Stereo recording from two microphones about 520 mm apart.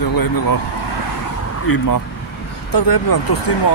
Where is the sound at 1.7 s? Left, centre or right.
Left.